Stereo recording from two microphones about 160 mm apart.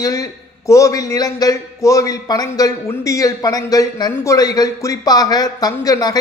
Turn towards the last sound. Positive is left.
turn(degrees=25)  # may be behind; listen again after turning